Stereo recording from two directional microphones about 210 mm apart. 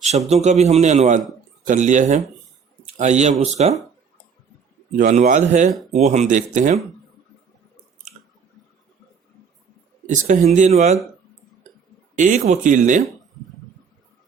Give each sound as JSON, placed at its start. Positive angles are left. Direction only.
{"t": 0.3, "sound": "a man's voice", "side_deg": -30}
{"t": 4.9, "sound": "a man's voice", "side_deg": -35}
{"t": 10.1, "sound": "a man's voice", "side_deg": -35}
{"t": 12.1, "sound": "a man's voice", "side_deg": -35}